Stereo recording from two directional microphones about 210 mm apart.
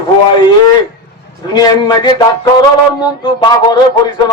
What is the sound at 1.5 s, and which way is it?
A man's voice, 20° left (ahead or behind).